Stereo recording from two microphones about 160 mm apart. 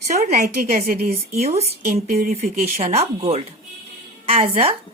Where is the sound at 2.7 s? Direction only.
45° right (ahead or behind).